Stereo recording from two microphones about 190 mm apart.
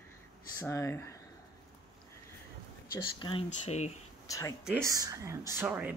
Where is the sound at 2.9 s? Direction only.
25° left (ahead or behind).